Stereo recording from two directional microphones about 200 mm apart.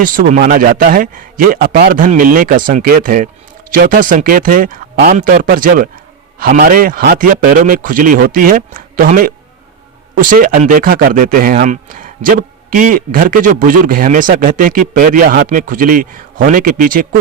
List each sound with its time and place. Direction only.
0.0 s speech: 45° right (ahead or behind)